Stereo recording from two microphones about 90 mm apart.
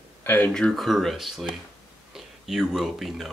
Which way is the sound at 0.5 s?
5° left (ahead or behind).